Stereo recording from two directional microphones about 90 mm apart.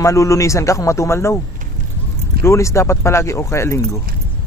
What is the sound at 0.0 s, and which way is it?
A man's voice, 35° left (ahead or behind).